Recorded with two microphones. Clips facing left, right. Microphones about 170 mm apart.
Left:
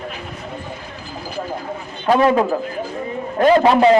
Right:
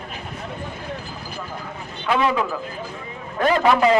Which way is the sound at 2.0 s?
45° left (ahead or behind).